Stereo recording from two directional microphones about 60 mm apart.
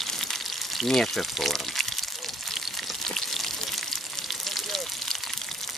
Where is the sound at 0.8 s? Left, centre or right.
Centre.